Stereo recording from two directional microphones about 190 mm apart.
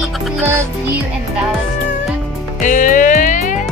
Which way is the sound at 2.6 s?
40° left (ahead or behind).